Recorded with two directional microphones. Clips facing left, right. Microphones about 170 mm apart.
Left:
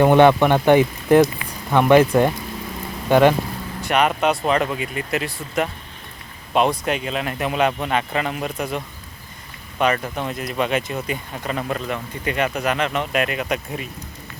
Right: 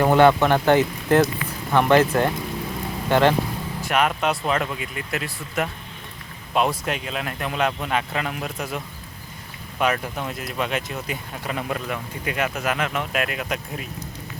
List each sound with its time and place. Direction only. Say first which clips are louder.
0.0 s speech: left 3 dB; 20° left (ahead or behind)
3.8 s speech: left 3 dB; centre (ahead or behind)